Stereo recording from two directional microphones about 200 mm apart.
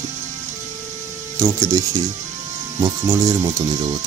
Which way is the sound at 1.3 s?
15° right (ahead or behind).